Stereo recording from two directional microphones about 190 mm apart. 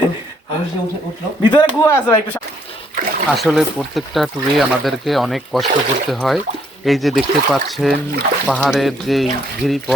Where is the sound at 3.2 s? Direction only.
Centre (ahead or behind).